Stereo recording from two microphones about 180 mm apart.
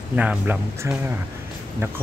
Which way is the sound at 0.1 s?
10° right (ahead or behind).